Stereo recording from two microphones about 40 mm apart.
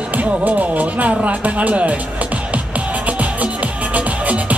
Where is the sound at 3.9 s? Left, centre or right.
Right.